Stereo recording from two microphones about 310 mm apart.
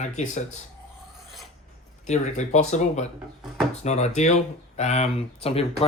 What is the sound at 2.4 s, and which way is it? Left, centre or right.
Speech, left.